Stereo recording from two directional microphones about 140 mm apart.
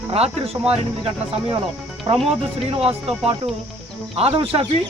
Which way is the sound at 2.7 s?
45° right (ahead or behind).